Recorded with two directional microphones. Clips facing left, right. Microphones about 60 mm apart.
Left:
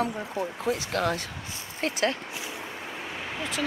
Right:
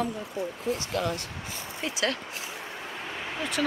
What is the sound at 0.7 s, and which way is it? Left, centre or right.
Speech, left.